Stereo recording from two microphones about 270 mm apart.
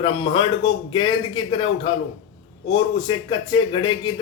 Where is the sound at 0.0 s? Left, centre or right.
Centre.